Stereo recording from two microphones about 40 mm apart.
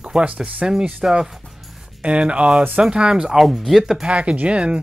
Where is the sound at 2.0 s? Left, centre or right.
Right; by 3.5 s centre.